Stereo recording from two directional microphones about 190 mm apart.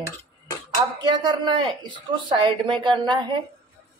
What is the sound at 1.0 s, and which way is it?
A woman's voice, 25° right (ahead or behind).